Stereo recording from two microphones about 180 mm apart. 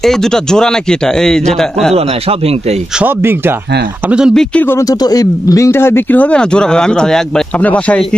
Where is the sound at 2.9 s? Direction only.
10° right (ahead or behind).